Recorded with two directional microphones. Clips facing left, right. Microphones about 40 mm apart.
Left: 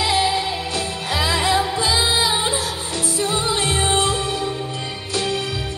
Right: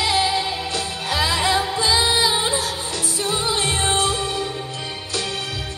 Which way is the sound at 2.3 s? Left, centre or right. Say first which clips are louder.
Even; centre.